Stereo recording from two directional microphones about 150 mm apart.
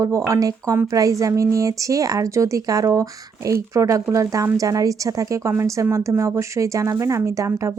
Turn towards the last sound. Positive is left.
turn(degrees=-20)  # may be behind; listen again after turning